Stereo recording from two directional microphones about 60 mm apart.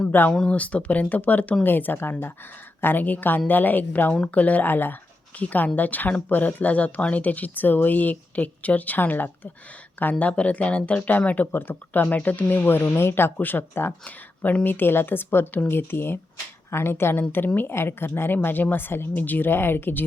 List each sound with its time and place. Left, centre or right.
0.1 s a woman's voice: left
12.8 s a woman's voice: left
14.0 s a woman's voice: left